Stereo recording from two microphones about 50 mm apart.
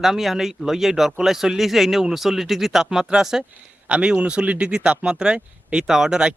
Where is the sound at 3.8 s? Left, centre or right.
Centre.